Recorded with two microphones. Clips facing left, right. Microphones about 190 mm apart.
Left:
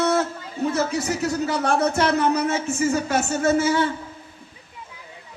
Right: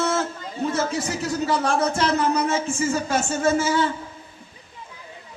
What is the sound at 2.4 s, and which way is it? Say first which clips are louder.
A man's voice: left 1 dB; 30° right (ahead or behind).